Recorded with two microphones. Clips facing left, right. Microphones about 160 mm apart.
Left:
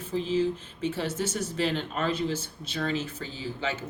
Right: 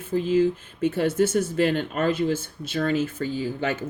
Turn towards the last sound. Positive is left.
turn(degrees=-55)  # may be behind; listen again after turning